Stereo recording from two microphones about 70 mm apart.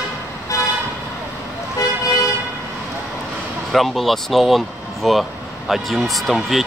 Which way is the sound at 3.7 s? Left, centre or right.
Centre.